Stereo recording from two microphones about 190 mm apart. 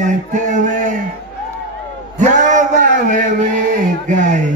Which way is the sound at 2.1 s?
40° right (ahead or behind).